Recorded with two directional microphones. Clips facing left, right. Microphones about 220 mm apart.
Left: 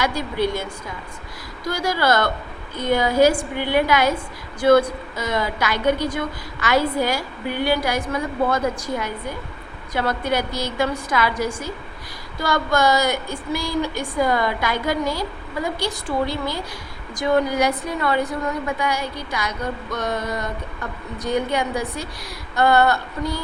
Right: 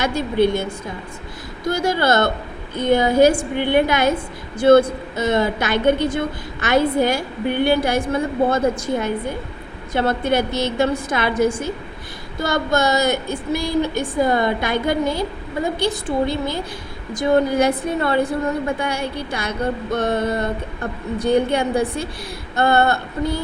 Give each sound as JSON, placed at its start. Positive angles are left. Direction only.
{"t": 0.0, "sound": "a woman's voice", "side_deg": -25}